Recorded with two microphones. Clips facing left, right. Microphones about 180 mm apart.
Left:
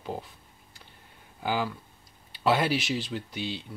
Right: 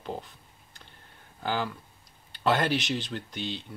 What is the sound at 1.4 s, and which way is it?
Speech, 10° left (ahead or behind).